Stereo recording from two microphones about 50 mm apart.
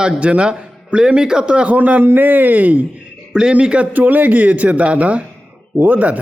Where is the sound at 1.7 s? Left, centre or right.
Right.